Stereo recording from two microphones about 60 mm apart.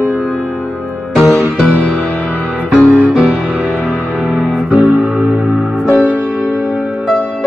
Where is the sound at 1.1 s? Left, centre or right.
Centre.